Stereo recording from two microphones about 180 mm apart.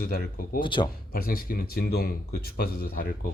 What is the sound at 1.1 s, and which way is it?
Speech, 55° left (ahead or behind).